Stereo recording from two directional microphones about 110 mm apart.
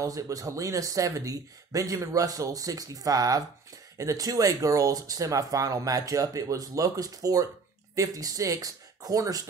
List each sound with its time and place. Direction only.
0.0 s speech: 30° right (ahead or behind)